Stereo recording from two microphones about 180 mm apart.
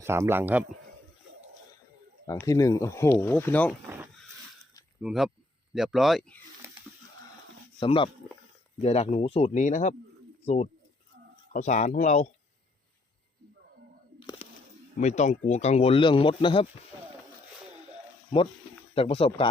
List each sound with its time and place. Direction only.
0.0 s speech: 15° right (ahead or behind)
2.2 s speech: 20° left (ahead or behind)
4.9 s speech: 5° right (ahead or behind)
7.8 s speech: 30° left (ahead or behind)
15.0 s speech: 40° left (ahead or behind)
18.9 s speech: 30° left (ahead or behind)